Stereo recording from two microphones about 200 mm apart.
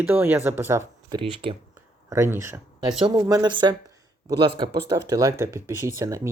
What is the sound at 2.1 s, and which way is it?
Speech, 15° right (ahead or behind).